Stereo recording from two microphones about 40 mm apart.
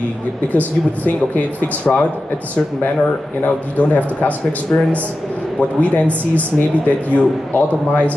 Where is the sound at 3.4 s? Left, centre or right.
Left.